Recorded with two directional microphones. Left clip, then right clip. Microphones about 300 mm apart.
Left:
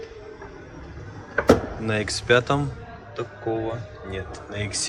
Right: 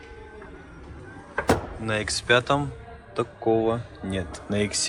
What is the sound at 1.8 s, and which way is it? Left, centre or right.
Speech, centre.